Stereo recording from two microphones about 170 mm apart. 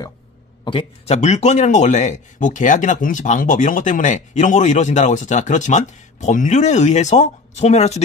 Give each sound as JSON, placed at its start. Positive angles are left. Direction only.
{"t": 0.7, "sound": "speech", "side_deg": 35}